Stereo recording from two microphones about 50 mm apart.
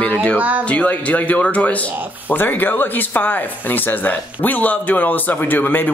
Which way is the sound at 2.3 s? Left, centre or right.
Left.